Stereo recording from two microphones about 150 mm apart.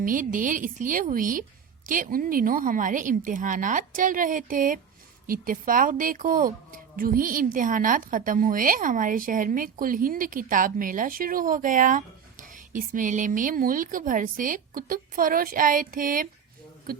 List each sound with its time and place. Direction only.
0.0 s a woman's voice: 65° right (ahead or behind)